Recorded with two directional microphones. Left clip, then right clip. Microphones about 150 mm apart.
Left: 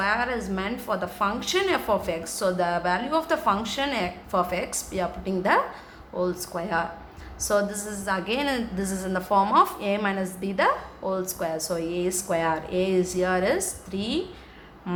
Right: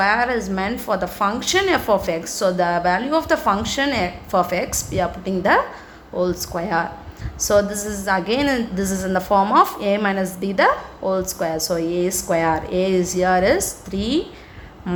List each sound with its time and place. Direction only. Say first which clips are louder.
0.0 s a woman's voice: right 7 dB; 30° right (ahead or behind)